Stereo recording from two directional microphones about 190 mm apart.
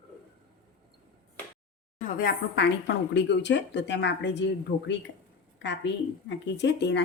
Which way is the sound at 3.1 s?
65° left (ahead or behind).